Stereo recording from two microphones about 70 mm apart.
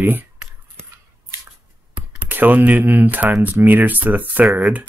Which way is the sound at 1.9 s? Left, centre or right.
Right.